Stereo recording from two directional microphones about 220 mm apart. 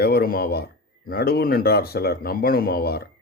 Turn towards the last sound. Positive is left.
turn(degrees=45)  # may be behind; listen again after turning